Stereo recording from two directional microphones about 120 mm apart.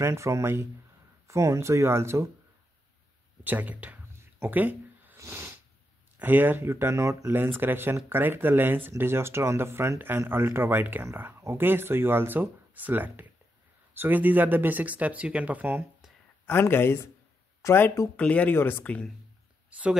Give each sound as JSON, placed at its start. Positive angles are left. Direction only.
{"t": 0.0, "sound": "speech", "side_deg": -25}
{"t": 3.4, "sound": "a sound", "side_deg": -15}
{"t": 6.1, "sound": "speech", "side_deg": -15}
{"t": 16.4, "sound": "speech", "side_deg": 20}
{"t": 18.1, "sound": "speech", "side_deg": 10}